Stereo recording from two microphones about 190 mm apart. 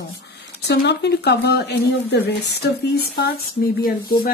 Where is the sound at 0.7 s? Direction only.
60° left (ahead or behind).